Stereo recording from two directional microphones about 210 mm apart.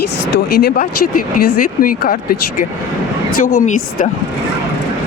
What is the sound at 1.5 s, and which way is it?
Speech, 40° left (ahead or behind).